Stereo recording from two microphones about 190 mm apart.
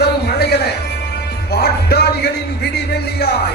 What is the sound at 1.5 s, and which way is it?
Speech, 55° left (ahead or behind).